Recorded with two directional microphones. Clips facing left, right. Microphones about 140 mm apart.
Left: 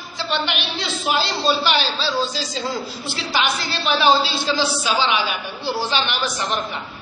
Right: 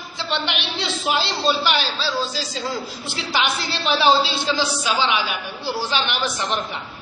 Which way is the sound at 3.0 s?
20° right (ahead or behind).